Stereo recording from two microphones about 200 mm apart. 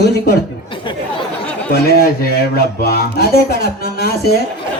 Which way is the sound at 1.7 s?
50° left (ahead or behind).